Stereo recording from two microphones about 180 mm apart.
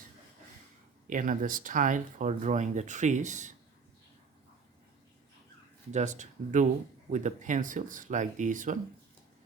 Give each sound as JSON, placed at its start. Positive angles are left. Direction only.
{"t": 1.0, "sound": "speech", "side_deg": -50}
{"t": 5.9, "sound": "speech", "side_deg": -40}